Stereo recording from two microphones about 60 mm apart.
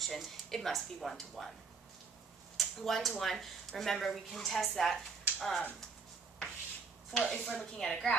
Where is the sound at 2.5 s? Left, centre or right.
Centre.